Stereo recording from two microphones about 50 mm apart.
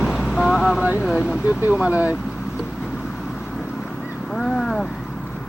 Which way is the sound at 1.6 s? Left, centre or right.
Right.